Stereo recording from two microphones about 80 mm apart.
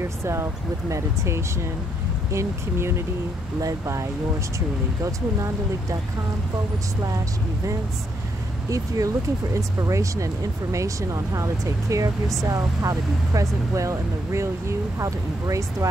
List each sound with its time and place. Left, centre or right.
0.2 s speech: right
3.6 s speech: right
8.6 s speech: right